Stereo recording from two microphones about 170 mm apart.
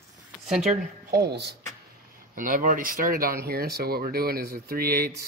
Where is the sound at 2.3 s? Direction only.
55° right (ahead or behind).